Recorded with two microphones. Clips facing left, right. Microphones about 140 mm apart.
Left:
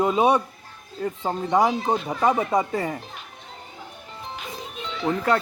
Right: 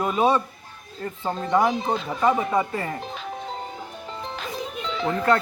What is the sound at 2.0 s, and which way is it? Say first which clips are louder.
Music: right 2 dB; 15° left (ahead or behind).